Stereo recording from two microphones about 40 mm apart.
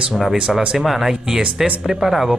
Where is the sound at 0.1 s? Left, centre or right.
Centre.